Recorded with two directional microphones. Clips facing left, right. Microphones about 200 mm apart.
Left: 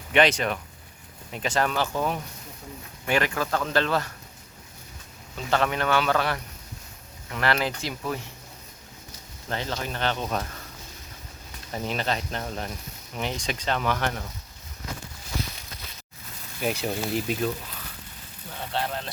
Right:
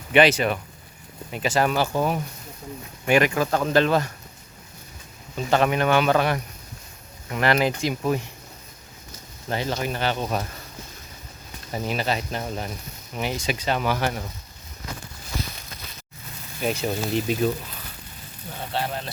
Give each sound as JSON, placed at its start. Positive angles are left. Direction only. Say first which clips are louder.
{"t": 0.1, "sound": "speech", "louder": "right 4 dB", "side_deg": -5}
{"t": 5.4, "sound": "speech", "louder": "right 4 dB", "side_deg": -15}
{"t": 9.5, "sound": "speech", "louder": "right 4 dB", "side_deg": -10}
{"t": 11.7, "sound": "speech", "louder": "right 2 dB", "side_deg": -5}
{"t": 16.6, "sound": "speech", "louder": "right 2 dB", "side_deg": 5}
{"t": 18.7, "sound": "speech", "louder": "right 1 dB", "side_deg": -5}